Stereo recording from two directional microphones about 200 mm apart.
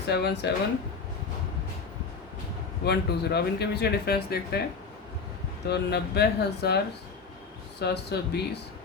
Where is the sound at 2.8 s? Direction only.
55° left (ahead or behind).